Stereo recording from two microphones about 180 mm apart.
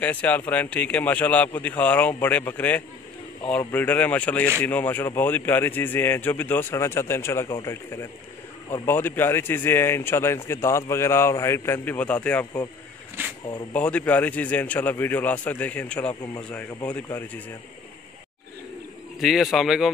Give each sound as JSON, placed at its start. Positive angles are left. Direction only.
{"t": 0.0, "sound": "a man's voice", "side_deg": 10}
{"t": 13.2, "sound": "speech", "side_deg": -10}
{"t": 13.7, "sound": "a man's voice", "side_deg": 10}
{"t": 19.1, "sound": "speech", "side_deg": 0}